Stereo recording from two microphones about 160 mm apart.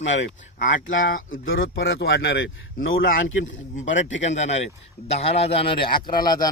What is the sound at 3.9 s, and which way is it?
A man's voice, 45° left (ahead or behind).